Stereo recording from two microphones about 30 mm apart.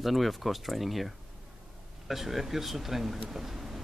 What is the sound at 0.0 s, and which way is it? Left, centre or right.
Speech, centre.